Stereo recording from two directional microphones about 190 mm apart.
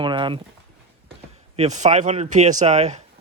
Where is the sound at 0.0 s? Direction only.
25° right (ahead or behind).